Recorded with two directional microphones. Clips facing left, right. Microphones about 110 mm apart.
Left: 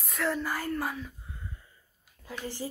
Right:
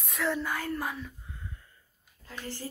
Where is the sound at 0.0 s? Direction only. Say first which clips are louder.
Even; centre (ahead or behind).